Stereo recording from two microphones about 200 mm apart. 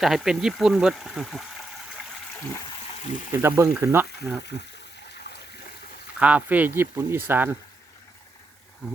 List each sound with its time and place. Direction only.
0.0 s speech: centre (ahead or behind)
3.3 s speech: 10° right (ahead or behind)
6.1 s speech: 5° right (ahead or behind)